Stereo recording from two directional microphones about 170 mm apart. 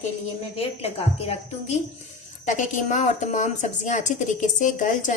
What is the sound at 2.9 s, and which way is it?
A woman's voice, 45° left (ahead or behind).